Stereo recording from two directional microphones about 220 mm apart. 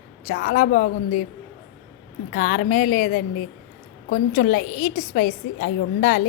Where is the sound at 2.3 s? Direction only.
40° left (ahead or behind).